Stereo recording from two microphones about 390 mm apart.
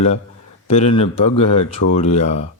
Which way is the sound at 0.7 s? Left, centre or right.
Centre.